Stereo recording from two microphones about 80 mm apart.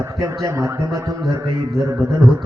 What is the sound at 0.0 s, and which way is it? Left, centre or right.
Speech, right.